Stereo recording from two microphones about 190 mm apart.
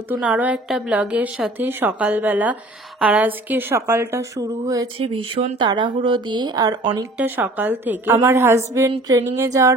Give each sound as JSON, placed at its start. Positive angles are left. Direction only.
{"t": 0.2, "sound": "a woman's voice", "side_deg": -5}
{"t": 5.0, "sound": "speech", "side_deg": -30}
{"t": 7.2, "sound": "a woman's voice", "side_deg": -10}